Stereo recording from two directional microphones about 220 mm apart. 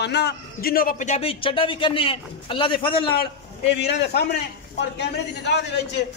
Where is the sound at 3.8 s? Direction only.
50° left (ahead or behind).